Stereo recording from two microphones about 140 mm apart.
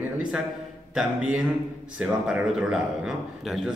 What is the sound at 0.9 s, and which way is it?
A man's voice, 10° right (ahead or behind).